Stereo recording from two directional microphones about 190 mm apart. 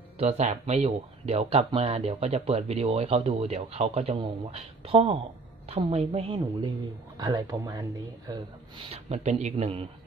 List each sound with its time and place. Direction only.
0.2 s a woman's voice: 35° right (ahead or behind); by 7.8 s 15° right (ahead or behind)
8.3 s speech: 30° right (ahead or behind)